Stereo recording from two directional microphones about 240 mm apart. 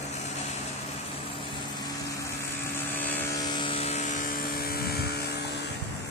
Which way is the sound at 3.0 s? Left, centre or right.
Centre.